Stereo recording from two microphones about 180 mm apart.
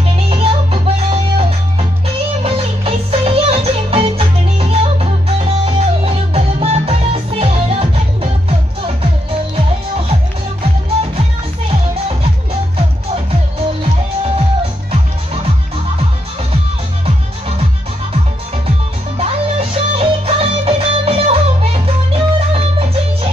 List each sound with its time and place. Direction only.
0.0 s music: 30° right (ahead or behind)
17.0 s music: 35° right (ahead or behind)
19.1 s music: 35° right (ahead or behind)